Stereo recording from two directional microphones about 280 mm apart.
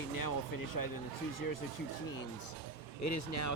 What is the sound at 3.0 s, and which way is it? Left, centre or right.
Speech, left.